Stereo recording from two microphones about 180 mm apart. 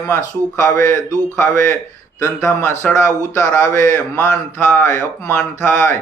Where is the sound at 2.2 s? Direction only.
15° left (ahead or behind).